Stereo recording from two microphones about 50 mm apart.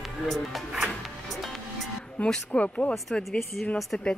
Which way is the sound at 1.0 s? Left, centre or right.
Centre.